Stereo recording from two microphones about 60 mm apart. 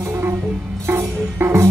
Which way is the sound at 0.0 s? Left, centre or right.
Right.